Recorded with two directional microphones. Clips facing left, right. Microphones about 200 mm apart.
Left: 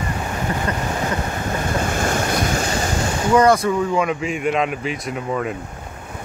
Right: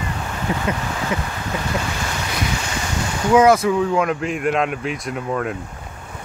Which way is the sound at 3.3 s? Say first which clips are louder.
Right 2 dB; 5° right (ahead or behind).